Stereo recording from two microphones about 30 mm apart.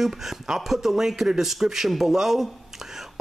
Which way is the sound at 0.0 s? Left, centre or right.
Centre.